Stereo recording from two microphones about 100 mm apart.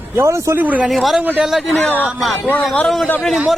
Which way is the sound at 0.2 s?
30° right (ahead or behind).